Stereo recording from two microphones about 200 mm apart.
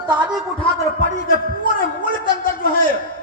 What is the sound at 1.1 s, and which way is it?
Speech, 45° left (ahead or behind).